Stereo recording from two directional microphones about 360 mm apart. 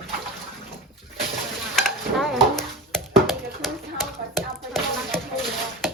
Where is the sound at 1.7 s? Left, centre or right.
Centre.